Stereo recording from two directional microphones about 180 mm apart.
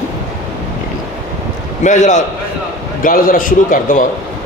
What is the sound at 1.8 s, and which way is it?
A man's voice, 45° left (ahead or behind).